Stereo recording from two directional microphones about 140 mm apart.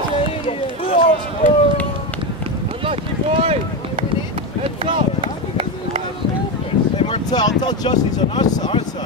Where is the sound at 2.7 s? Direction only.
40° right (ahead or behind).